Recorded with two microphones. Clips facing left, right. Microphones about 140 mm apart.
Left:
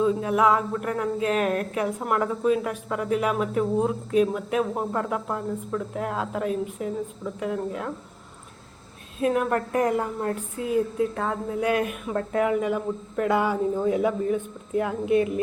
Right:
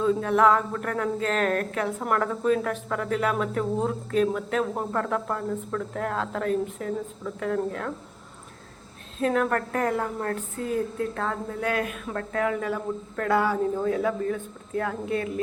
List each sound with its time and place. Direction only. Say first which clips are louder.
0.0 s speech: even; 10° left (ahead or behind)
9.2 s speech: left 1 dB; 15° left (ahead or behind)